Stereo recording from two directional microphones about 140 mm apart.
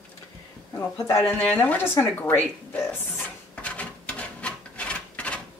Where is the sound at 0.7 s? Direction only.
20° left (ahead or behind).